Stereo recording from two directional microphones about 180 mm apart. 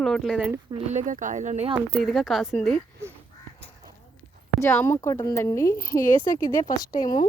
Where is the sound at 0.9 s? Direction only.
45° right (ahead or behind).